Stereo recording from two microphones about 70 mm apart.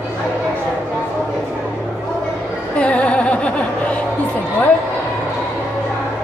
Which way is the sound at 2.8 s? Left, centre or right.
Centre.